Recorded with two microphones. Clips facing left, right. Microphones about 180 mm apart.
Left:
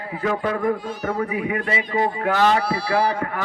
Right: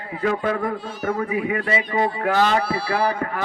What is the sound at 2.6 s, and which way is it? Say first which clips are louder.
Speech: left 1 dB; 55° right (ahead or behind).